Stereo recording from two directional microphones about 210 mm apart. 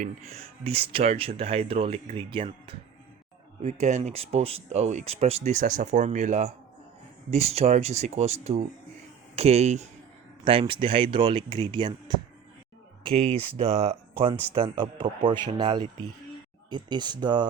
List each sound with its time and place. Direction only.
0.0 s speech: 30° right (ahead or behind)